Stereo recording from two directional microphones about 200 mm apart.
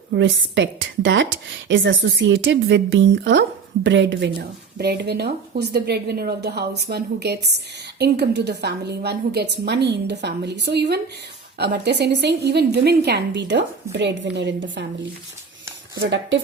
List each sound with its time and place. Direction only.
0.1 s a woman's voice: 65° right (ahead or behind)
16.0 s a woman's voice: 65° right (ahead or behind)